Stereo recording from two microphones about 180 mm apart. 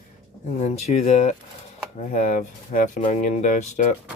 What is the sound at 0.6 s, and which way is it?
Speech, 35° left (ahead or behind).